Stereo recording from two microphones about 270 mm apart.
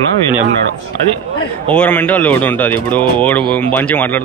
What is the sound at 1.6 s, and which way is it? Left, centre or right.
A man's voice, centre.